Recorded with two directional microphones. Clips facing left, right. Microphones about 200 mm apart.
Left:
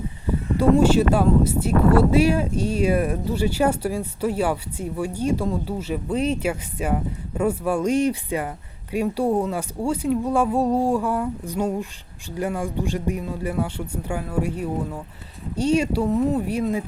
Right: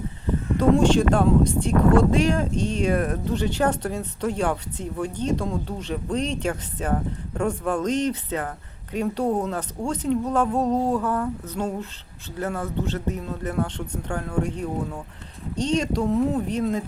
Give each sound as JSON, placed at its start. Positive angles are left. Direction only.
{"t": 0.3, "sound": "speech", "side_deg": 10}